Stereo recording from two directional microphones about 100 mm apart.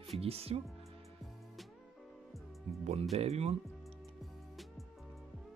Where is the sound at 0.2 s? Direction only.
85° right.